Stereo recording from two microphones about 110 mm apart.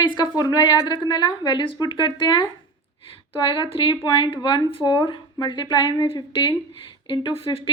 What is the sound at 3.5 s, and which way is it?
Speech, 55° left (ahead or behind).